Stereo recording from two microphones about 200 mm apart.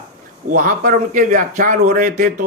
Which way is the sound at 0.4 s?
40° right (ahead or behind).